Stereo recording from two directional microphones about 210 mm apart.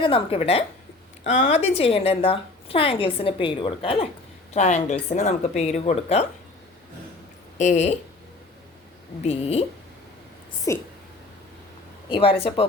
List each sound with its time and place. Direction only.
0.0 s a woman's voice: 25° left (ahead or behind)
7.6 s a woman's voice: 35° left (ahead or behind)
9.2 s a woman's voice: 30° left (ahead or behind)
10.7 s speech: 15° left (ahead or behind)
12.0 s a woman's voice: 25° left (ahead or behind)